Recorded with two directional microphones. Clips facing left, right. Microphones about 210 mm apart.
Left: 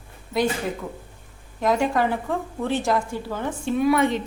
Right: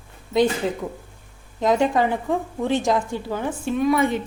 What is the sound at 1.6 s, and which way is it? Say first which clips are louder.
Speech: right 2 dB; 20° right (ahead or behind).